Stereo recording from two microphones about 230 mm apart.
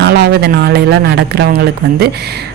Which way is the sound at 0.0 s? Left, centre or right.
Right.